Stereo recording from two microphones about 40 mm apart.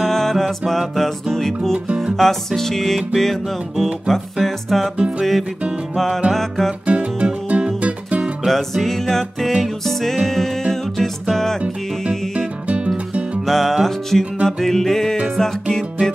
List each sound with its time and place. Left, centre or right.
0.0 s music: centre
4.1 s music: centre
5.9 s music: centre
6.9 s music: right
8.5 s music: centre
12.6 s music: right
13.5 s music: centre